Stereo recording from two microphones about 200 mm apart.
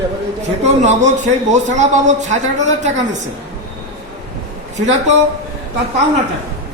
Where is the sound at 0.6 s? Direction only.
35° right (ahead or behind).